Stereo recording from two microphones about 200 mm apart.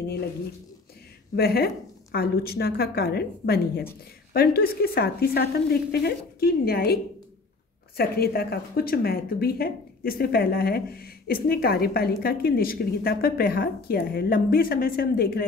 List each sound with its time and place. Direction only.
1.3 s speech: 50° left (ahead or behind)
8.0 s speech: 50° left (ahead or behind)